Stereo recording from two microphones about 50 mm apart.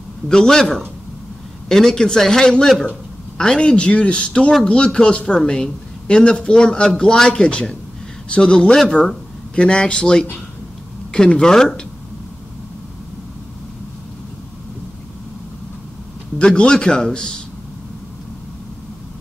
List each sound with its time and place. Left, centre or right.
0.3 s a man's voice: centre
16.3 s a man's voice: centre